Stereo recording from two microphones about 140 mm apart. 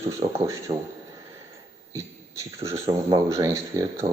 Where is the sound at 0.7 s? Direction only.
45° right (ahead or behind).